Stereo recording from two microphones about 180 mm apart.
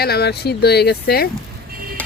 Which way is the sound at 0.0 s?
65° left (ahead or behind).